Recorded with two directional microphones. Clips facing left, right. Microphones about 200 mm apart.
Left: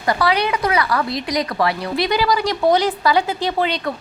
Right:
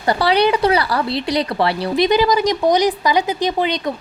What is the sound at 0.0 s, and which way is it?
Speech, 30° right (ahead or behind).